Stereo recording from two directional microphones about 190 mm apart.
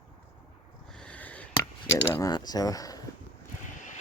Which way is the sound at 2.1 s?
20° left (ahead or behind).